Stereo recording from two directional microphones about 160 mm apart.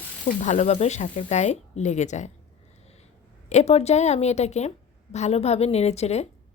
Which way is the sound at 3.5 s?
45° left (ahead or behind).